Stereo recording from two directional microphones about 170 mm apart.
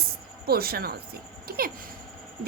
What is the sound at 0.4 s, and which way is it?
A woman's voice, 65° right (ahead or behind).